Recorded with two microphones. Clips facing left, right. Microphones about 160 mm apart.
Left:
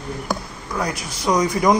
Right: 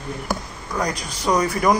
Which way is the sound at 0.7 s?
10° left (ahead or behind).